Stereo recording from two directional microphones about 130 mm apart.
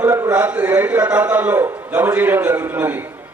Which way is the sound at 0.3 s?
10° right (ahead or behind).